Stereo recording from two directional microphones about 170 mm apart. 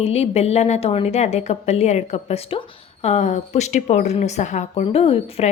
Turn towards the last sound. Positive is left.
turn(degrees=35)  # may be behind; listen again after turning